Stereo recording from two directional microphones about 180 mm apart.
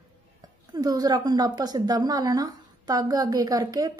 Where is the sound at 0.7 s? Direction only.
20° right (ahead or behind).